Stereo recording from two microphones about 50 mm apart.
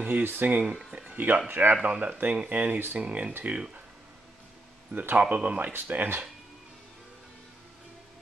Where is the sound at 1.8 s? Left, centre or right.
Right.